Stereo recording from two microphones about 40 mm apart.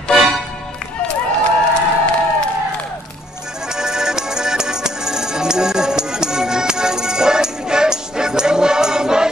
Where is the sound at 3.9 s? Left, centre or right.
Centre.